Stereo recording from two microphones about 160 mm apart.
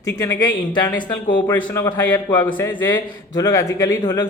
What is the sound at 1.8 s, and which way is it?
Speech, 15° left (ahead or behind).